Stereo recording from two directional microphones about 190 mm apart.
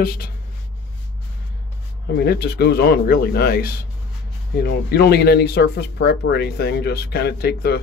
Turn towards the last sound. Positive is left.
turn(degrees=55)  # may be behind; listen again after turning